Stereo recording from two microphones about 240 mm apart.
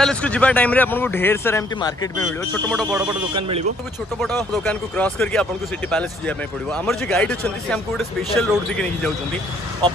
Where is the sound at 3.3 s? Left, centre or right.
Right.